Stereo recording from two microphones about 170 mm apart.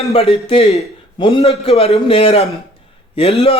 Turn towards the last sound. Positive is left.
turn(degrees=35)  # may be behind; listen again after turning